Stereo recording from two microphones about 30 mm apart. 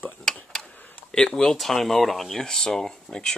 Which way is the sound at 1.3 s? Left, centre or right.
Centre.